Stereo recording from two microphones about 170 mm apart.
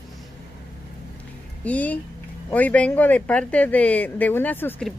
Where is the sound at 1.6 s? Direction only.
10° left (ahead or behind).